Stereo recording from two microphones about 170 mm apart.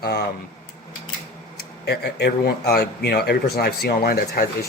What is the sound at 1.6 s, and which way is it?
Speech, 70° left (ahead or behind).